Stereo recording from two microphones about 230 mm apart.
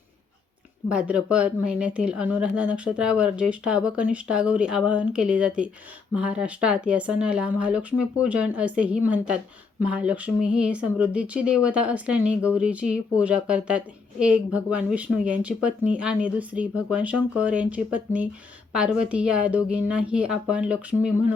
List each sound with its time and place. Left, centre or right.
0.9 s speech: centre